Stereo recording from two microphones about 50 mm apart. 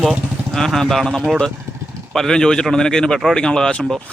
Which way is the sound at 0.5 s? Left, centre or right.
Centre.